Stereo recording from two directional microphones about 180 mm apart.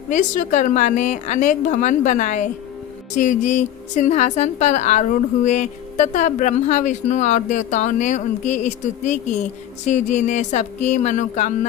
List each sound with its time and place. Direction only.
0.1 s a woman's voice: 45° left (ahead or behind)